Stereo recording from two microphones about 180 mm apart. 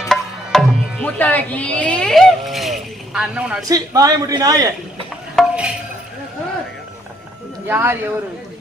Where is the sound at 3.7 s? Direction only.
20° right (ahead or behind).